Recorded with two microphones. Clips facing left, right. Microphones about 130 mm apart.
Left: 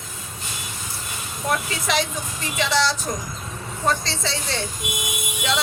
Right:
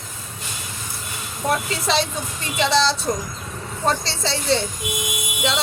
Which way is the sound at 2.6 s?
30° right (ahead or behind).